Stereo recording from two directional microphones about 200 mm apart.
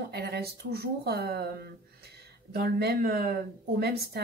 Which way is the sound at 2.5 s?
55° right (ahead or behind).